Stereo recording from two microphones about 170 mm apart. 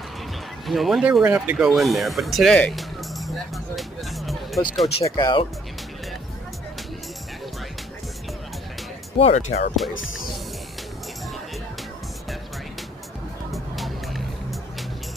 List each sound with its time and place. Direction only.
0.7 s speech: centre (ahead or behind)
3.3 s music: centre (ahead or behind)
5.0 s speech: 25° left (ahead or behind)
9.2 s speech: 40° left (ahead or behind)
13.5 s music: centre (ahead or behind)